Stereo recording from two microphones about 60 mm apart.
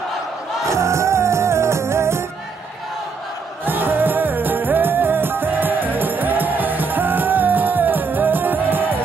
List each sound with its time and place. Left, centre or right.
0.7 s music: right
3.6 s music: right